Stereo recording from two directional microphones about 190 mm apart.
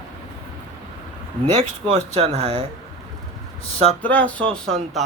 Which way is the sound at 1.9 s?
35° right (ahead or behind).